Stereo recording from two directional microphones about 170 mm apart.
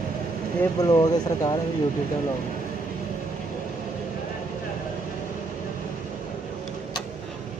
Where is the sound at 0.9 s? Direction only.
25° left (ahead or behind).